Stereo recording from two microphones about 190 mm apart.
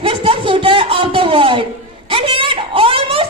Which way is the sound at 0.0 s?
30° right (ahead or behind).